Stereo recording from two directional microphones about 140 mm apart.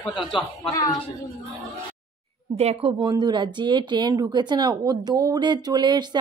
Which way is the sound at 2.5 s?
45° right (ahead or behind).